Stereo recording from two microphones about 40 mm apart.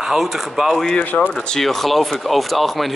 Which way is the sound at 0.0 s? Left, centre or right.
Centre.